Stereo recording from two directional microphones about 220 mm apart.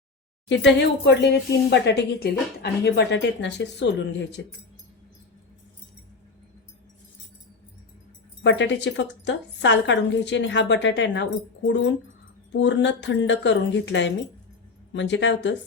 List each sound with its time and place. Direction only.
0.4 s speech: 55° left (ahead or behind)
8.4 s speech: 55° left (ahead or behind)